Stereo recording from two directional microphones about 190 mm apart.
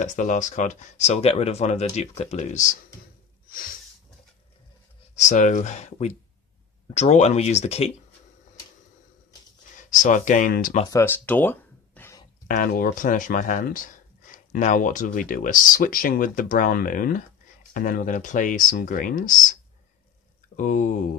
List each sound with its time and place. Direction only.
0.0 s speech: 40° left (ahead or behind)
5.1 s speech: 40° left (ahead or behind)
10.0 s speech: 40° left (ahead or behind)
10.9 s a sound: 15° left (ahead or behind)
12.4 s speech: 45° left (ahead or behind)
20.5 s speech: 45° left (ahead or behind)